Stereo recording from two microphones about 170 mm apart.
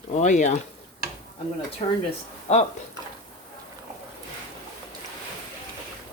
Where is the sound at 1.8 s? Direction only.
35° left (ahead or behind).